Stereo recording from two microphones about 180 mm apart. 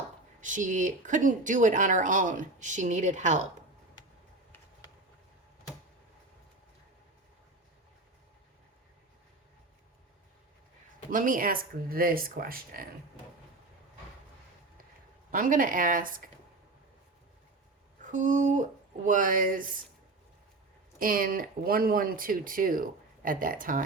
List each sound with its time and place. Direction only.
0.4 s speech: 45° right (ahead or behind)
11.1 s speech: 50° right (ahead or behind)
15.3 s speech: 50° right (ahead or behind)
18.0 s speech: 45° right (ahead or behind)
21.0 s speech: 50° right (ahead or behind)